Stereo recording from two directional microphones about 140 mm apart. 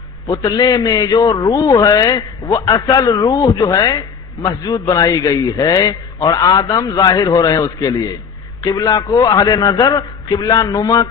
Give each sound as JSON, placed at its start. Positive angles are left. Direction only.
{"t": 0.3, "sound": "a man's voice", "side_deg": 30}